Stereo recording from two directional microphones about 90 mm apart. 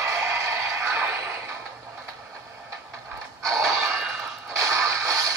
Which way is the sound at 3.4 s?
5° left (ahead or behind).